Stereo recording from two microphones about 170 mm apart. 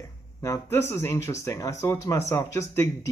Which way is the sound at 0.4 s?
15° left (ahead or behind).